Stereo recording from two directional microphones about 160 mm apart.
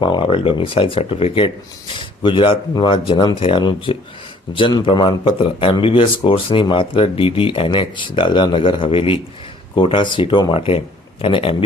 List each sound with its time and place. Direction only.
0.0 s speech: 30° left (ahead or behind)